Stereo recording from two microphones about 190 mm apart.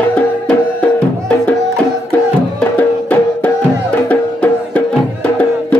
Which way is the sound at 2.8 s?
10° left (ahead or behind).